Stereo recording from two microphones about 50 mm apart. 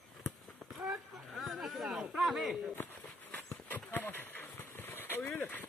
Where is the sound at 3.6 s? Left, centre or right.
Left.